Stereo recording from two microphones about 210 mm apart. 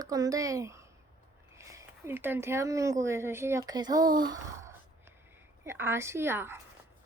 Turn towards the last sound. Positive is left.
turn(degrees=-10)  # may be behind; listen again after turning